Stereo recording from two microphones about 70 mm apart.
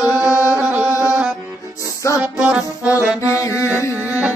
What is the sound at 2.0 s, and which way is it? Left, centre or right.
Music, left.